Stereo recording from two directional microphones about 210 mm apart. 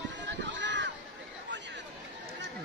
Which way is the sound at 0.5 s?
60° right (ahead or behind).